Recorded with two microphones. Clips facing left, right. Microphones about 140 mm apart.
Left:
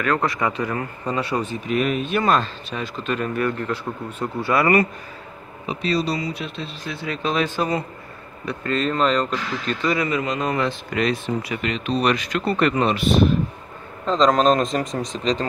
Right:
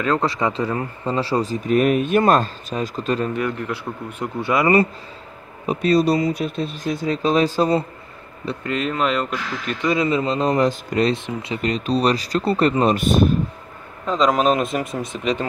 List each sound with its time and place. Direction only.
0.0 s speech: 25° right (ahead or behind)
3.3 s speech: 15° right (ahead or behind)
5.7 s speech: 50° right (ahead or behind)
8.6 s speech: 10° right (ahead or behind); by 11.1 s 35° right (ahead or behind)
11.2 s speech: 25° right (ahead or behind)
11.6 s speech: 35° right (ahead or behind)
12.9 s speech: 45° right (ahead or behind)
14.0 s speech: 5° right (ahead or behind)